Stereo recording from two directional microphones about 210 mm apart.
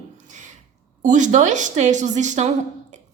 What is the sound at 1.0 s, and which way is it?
A woman's voice, 35° right (ahead or behind).